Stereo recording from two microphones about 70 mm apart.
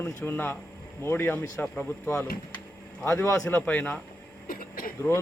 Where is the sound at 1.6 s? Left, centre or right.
Centre.